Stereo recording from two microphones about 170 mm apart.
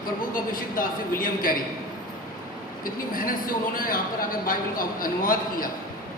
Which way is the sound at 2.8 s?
55° left (ahead or behind).